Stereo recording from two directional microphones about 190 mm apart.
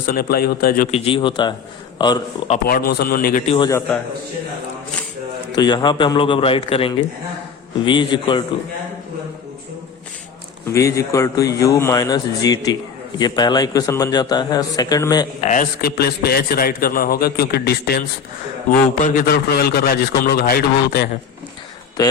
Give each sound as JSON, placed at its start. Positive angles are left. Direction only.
{"t": 0.0, "sound": "a man's voice", "side_deg": 50}
{"t": 0.9, "sound": "a man's voice", "side_deg": 30}
{"t": 2.6, "sound": "a man's voice", "side_deg": 50}
{"t": 3.4, "sound": "a man's voice", "side_deg": 30}
{"t": 3.7, "sound": "speech", "side_deg": 15}
{"t": 5.5, "sound": "a man's voice", "side_deg": 25}
{"t": 10.7, "sound": "a man's voice", "side_deg": 15}
{"t": 15.4, "sound": "a man's voice", "side_deg": 40}
{"t": 15.8, "sound": "a man's voice", "side_deg": 55}
{"t": 19.0, "sound": "a man's voice", "side_deg": 50}